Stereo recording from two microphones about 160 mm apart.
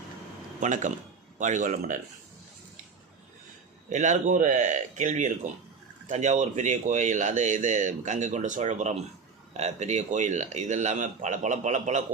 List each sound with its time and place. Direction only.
0.6 s speech: 50° right (ahead or behind)
3.8 s speech: 50° right (ahead or behind)